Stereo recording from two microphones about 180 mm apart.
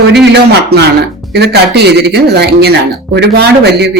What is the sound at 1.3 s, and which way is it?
Speech, 65° right (ahead or behind).